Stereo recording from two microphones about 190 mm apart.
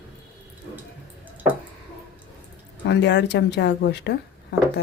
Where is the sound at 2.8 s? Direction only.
65° left (ahead or behind).